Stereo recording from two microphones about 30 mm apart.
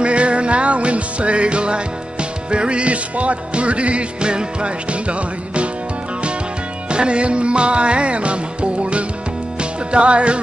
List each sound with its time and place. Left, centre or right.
0.0 s music: right
6.9 s music: right